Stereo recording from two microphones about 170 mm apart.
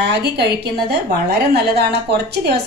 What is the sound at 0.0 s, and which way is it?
A woman's voice, 75° right (ahead or behind).